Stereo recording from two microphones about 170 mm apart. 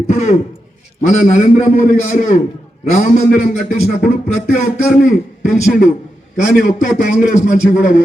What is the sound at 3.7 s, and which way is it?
Speech, 55° left (ahead or behind).